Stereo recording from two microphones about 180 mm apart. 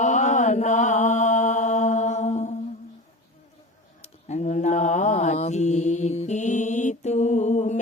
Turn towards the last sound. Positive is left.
turn(degrees=40)  # may be behind; listen again after turning